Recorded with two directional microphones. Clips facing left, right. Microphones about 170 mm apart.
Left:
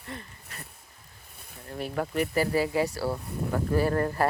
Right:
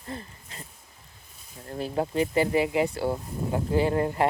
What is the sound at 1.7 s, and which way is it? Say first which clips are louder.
Speech: right 3 dB; 30° right (ahead or behind).